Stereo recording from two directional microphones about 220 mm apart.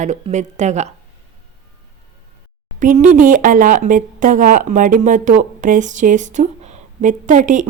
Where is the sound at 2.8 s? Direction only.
35° right (ahead or behind).